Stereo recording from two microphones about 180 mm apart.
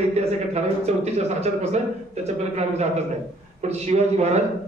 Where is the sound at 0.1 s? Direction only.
35° right (ahead or behind).